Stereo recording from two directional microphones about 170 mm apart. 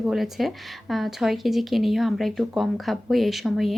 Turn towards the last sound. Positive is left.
turn(degrees=0)  # may be behind; listen again after turning